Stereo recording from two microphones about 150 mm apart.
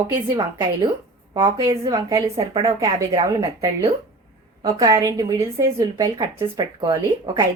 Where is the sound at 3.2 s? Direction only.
20° right (ahead or behind).